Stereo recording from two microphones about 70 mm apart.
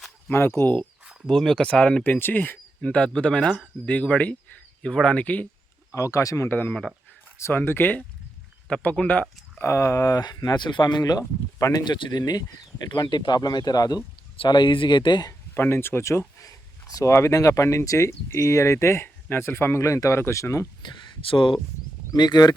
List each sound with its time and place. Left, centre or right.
0.3 s speech: left
0.6 s speech: left
1.3 s speech: centre
2.0 s speech: left
5.9 s speech: left
6.5 s speech: left
8.8 s speech: centre
9.6 s speech: left
10.2 s speech: left
13.0 s speech: left
14.5 s speech: left
15.5 s speech: left
17.1 s speech: left
22.1 s speech: left